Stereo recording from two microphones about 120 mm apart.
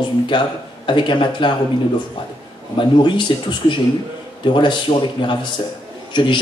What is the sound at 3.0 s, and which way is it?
Speech, 40° left (ahead or behind).